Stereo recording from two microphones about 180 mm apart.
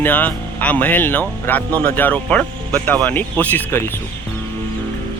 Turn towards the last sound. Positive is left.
turn(degrees=10)  # may be behind; listen again after turning